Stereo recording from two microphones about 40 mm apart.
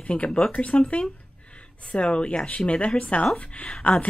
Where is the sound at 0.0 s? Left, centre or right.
Left.